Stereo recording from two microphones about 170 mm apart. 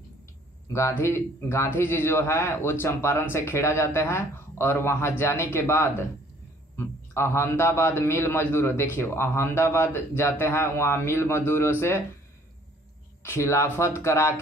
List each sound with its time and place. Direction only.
0.7 s a man's voice: 15° left (ahead or behind)
13.2 s a man's voice: 15° left (ahead or behind)